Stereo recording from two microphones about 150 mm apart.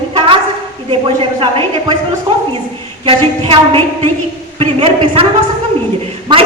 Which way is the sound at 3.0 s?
35° right (ahead or behind).